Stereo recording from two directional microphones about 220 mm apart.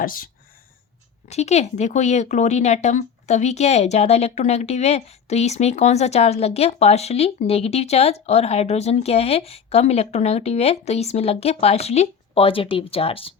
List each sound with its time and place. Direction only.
0.0 s speech: 40° left (ahead or behind)
1.3 s speech: 30° left (ahead or behind)